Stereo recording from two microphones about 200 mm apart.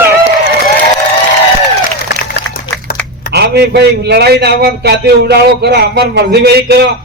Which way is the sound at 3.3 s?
55° right (ahead or behind).